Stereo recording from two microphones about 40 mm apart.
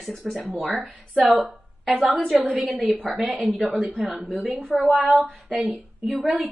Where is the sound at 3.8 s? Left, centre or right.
Right.